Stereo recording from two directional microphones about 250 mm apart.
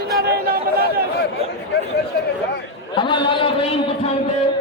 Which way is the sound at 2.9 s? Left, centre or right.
Centre.